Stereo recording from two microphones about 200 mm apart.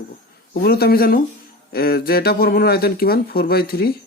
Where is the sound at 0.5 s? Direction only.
50° left (ahead or behind).